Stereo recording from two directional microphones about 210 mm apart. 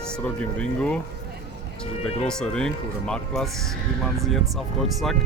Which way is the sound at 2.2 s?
5° left (ahead or behind).